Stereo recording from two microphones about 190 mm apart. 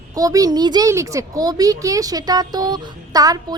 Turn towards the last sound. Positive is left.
turn(degrees=-20)  # may be behind; listen again after turning